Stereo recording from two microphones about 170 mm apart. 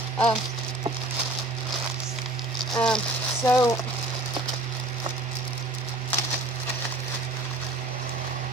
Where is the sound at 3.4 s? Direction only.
15° left (ahead or behind).